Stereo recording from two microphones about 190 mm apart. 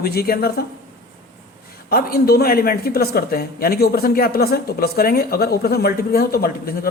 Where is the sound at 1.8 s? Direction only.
55° left (ahead or behind).